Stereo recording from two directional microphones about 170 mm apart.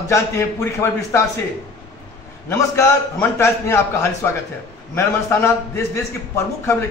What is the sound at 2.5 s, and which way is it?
A man's voice, 15° left (ahead or behind).